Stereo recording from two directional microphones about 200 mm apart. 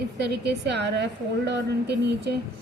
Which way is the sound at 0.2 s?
60° right (ahead or behind).